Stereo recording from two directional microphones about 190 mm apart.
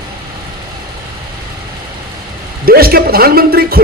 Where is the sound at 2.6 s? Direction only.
50° right (ahead or behind).